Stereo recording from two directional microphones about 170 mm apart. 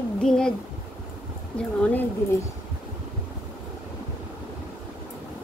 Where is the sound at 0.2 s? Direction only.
5° left (ahead or behind).